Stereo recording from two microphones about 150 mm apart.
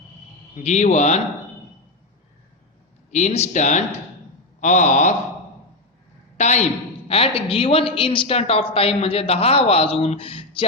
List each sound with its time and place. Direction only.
0.5 s speech: 50° left (ahead or behind)
3.1 s speech: 50° left (ahead or behind)
6.3 s a man's voice: 50° left (ahead or behind)
7.1 s a woman's voice: 40° left (ahead or behind)